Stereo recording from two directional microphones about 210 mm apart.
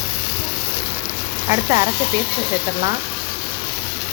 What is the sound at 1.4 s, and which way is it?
Speech, 20° right (ahead or behind).